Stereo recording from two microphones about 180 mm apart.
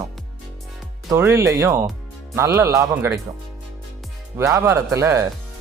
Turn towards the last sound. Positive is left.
turn(degrees=-15)  # may be behind; listen again after turning